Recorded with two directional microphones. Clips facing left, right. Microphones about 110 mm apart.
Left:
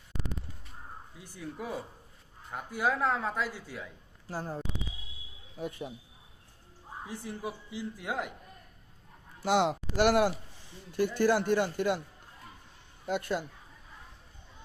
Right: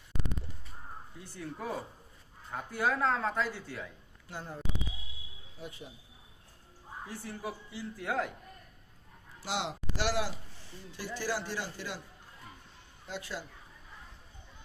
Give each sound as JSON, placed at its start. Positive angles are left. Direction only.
{"t": 1.2, "sound": "speech", "side_deg": 15}
{"t": 4.3, "sound": "speech", "side_deg": 35}
{"t": 5.5, "sound": "a man's voice", "side_deg": 55}
{"t": 7.1, "sound": "speech", "side_deg": 20}
{"t": 9.4, "sound": "a man's voice", "side_deg": 55}
{"t": 13.1, "sound": "a man's voice", "side_deg": 55}